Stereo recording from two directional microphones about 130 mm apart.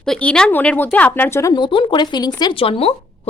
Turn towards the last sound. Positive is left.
turn(degrees=50)  # may be behind; listen again after turning